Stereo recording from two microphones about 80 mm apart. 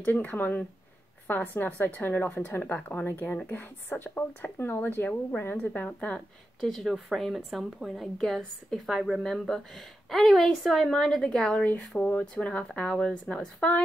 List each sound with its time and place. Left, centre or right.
0.0 s a woman's voice: centre